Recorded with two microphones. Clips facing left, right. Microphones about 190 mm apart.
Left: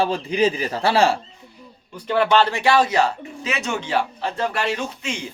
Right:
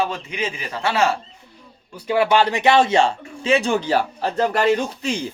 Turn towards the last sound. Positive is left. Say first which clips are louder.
# right 4 dB
turn(degrees=-35)  # may be behind; listen again after turning